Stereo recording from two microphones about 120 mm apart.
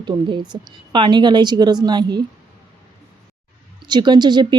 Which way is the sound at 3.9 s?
40° right (ahead or behind).